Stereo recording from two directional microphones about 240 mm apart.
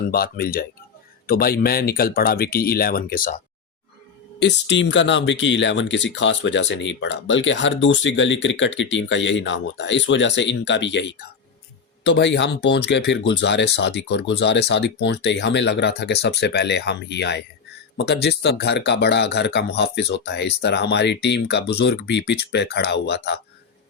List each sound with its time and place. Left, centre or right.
0.1 s speech: left
4.4 s speech: left